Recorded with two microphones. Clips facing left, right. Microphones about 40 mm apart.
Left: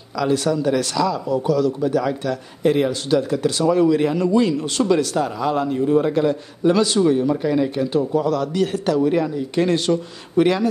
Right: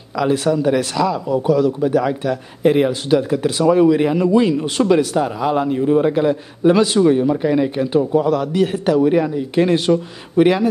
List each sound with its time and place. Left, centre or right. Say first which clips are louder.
0.2 s a man's voice: right 3 dB; right